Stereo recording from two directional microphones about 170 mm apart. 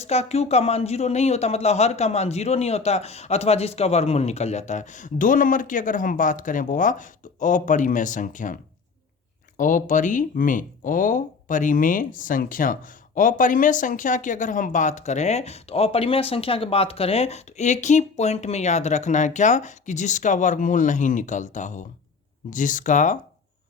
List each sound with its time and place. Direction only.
0.0 s speech: 40° left (ahead or behind)
9.6 s speech: 50° left (ahead or behind)